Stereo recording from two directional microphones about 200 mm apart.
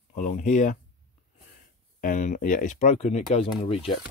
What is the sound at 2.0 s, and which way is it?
Speech, 40° left (ahead or behind).